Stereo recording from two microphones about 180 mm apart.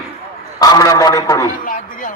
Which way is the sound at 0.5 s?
20° left (ahead or behind).